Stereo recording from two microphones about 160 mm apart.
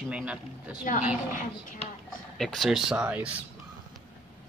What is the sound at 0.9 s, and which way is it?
Speech, 55° left (ahead or behind).